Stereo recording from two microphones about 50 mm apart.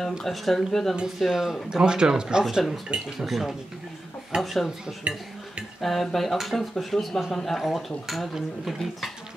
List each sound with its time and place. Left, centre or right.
0.2 s speech: centre
3.2 s speech: centre
5.1 s speech: centre
5.8 s speech: centre